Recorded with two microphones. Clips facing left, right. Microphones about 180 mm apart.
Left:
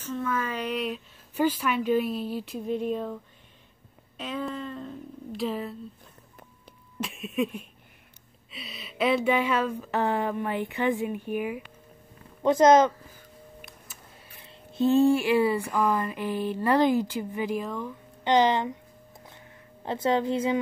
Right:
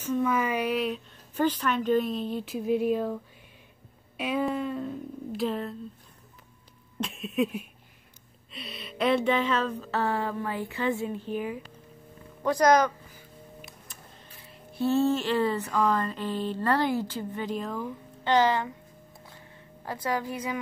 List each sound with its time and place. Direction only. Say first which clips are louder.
0.0 s a woman's voice: right 4 dB; 15° right (ahead or behind)
4.2 s speech: right 5 dB; 10° right (ahead or behind)
7.0 s a woman's voice: right 1 dB; centre (ahead or behind); by 12.9 s 25° left (ahead or behind)
14.7 s speech: left 4 dB; 20° left (ahead or behind); by 17.8 s centre (ahead or behind)
18.2 s a woman's voice: left 2 dB; 20° left (ahead or behind)
19.8 s a woman's voice: left 5 dB; 25° left (ahead or behind)